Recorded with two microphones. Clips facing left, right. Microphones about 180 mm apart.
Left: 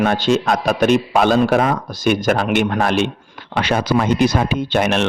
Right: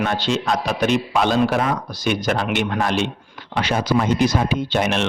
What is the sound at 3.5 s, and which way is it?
Speech, 65° left (ahead or behind).